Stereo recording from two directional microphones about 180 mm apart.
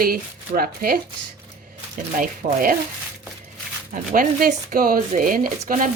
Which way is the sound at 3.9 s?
50° right (ahead or behind).